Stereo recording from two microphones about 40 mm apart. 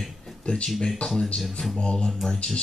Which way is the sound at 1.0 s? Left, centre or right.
Left.